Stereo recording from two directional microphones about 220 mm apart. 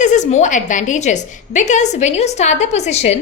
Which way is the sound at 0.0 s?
35° left (ahead or behind).